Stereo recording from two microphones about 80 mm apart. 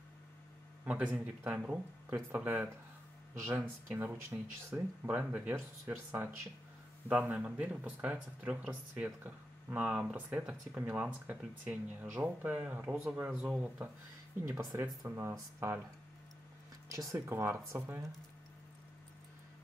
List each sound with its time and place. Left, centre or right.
0.8 s speech: centre
14.6 s speech: right
16.9 s speech: right